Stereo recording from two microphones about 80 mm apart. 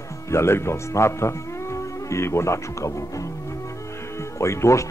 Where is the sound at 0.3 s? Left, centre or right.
Left.